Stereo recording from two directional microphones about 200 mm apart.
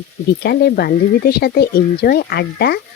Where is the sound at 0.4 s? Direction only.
50° left (ahead or behind).